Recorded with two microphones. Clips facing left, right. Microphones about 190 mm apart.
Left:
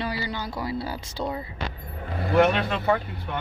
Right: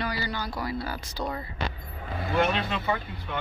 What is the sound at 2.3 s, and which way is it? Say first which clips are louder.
Speech: left 6 dB; 55° left (ahead or behind).